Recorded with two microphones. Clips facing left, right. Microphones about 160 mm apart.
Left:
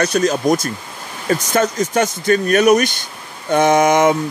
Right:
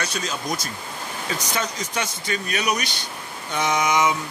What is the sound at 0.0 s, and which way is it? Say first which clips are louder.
Speech: left 13 dB; 45° left (ahead or behind).